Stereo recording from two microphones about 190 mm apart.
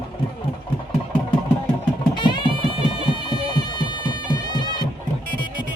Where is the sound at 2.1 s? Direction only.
25° left (ahead or behind).